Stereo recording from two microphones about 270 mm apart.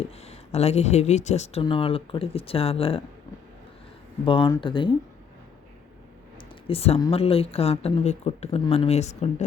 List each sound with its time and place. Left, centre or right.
0.0 s speech: left
4.3 s speech: centre
6.7 s speech: left